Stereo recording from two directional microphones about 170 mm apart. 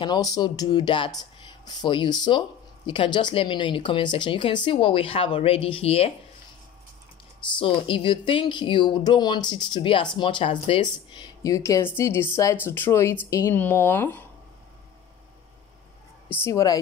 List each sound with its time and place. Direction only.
0.0 s speech: 25° left (ahead or behind)
7.5 s a woman's voice: 30° left (ahead or behind); by 14.2 s 10° left (ahead or behind)
16.4 s speech: 20° left (ahead or behind)